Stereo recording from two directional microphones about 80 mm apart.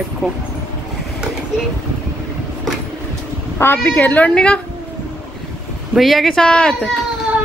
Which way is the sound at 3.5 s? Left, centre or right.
Left.